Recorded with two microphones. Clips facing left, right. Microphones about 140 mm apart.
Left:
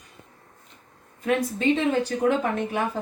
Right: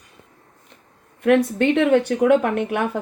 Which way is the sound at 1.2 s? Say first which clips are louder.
Right 7 dB; 70° right (ahead or behind).